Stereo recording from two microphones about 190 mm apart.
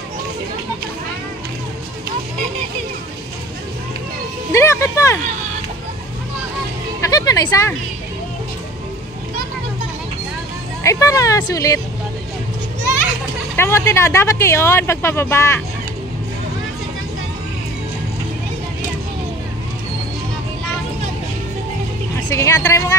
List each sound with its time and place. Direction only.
4.5 s music: 15° left (ahead or behind)
7.1 s a sound: 20° left (ahead or behind)
10.8 s speech: 15° left (ahead or behind)
13.6 s speech: 15° left (ahead or behind)
22.3 s speech: 15° left (ahead or behind)